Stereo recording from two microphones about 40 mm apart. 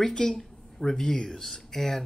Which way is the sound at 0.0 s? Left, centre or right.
Centre.